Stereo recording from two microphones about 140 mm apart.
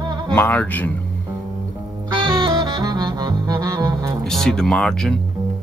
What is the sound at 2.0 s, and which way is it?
Saxophone, 25° right (ahead or behind).